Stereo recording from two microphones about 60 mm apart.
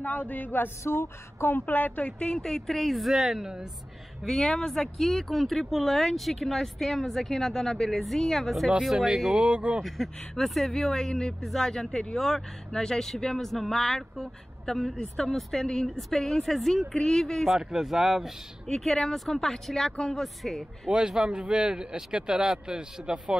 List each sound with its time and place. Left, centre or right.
0.0 s speech: left; by 3.6 s centre
4.2 s speech: centre
9.8 s speech: centre
17.5 s speech: centre
18.7 s speech: centre
20.9 s speech: centre